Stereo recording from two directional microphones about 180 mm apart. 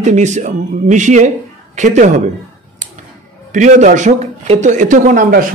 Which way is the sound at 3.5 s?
45° right (ahead or behind).